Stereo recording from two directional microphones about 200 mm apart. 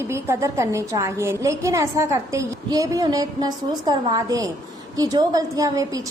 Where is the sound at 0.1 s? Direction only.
15° right (ahead or behind).